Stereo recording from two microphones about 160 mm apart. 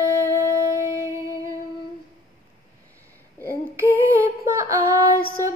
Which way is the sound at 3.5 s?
15° right (ahead or behind).